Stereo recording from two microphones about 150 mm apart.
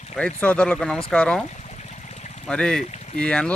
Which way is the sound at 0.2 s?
10° left (ahead or behind).